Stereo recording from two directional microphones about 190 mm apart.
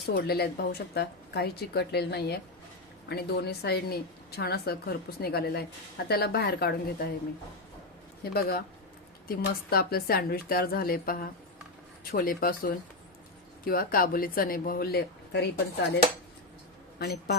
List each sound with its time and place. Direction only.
0.0 s a woman's voice: 55° left (ahead or behind)
8.2 s a woman's voice: 55° left (ahead or behind)